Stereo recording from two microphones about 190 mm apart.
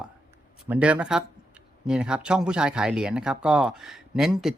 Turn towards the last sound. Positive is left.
turn(degrees=0)  # may be behind; listen again after turning